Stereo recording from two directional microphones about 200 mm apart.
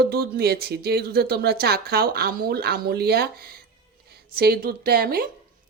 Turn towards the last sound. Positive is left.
turn(degrees=-50)  # may be behind; listen again after turning